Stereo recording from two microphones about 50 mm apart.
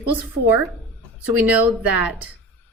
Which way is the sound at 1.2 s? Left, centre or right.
Right.